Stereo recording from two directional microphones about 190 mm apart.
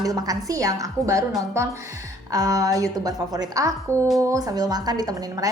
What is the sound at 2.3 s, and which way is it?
A woman's voice, 20° right (ahead or behind).